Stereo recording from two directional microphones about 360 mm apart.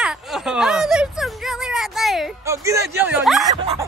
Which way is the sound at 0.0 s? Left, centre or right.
Centre.